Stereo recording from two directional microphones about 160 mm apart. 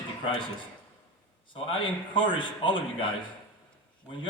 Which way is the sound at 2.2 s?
30° left (ahead or behind).